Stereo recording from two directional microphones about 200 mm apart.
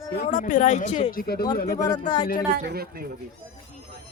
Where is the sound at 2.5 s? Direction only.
55° right (ahead or behind).